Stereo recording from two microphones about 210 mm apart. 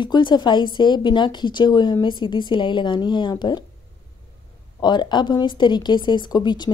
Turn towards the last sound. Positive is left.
turn(degrees=20)  # may be behind; listen again after turning